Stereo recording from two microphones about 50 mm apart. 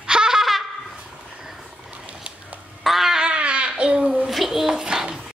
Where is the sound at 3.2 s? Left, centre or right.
Right.